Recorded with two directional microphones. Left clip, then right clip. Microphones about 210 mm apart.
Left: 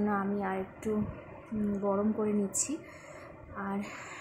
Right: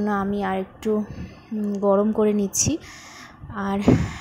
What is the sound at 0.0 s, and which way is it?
A woman's voice, 25° right (ahead or behind).